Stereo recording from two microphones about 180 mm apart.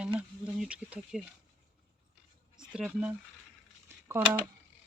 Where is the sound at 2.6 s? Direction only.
5° right (ahead or behind).